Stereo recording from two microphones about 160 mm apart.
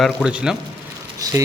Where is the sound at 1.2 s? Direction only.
20° right (ahead or behind).